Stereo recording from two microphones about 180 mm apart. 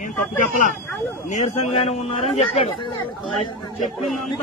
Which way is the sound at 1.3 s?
35° left (ahead or behind).